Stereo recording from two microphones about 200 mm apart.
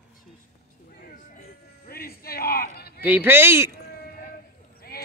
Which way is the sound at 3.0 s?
10° right (ahead or behind).